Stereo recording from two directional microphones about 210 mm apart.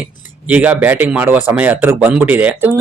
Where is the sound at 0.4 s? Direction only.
5° right (ahead or behind).